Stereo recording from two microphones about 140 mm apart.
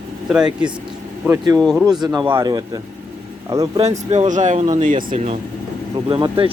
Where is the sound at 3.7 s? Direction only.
50° right (ahead or behind).